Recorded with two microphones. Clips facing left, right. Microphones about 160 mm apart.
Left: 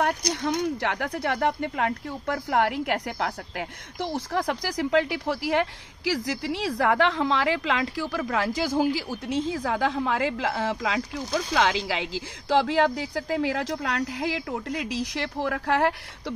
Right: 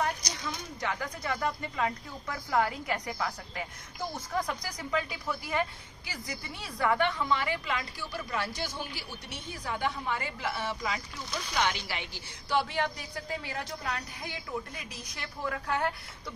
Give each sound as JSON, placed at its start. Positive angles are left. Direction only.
{"t": 0.0, "sound": "speech", "side_deg": 65}